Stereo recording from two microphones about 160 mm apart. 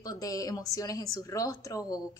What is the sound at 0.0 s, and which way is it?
Speech, 20° left (ahead or behind).